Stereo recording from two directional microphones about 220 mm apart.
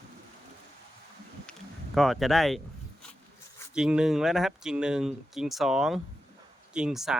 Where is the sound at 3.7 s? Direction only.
5° right (ahead or behind).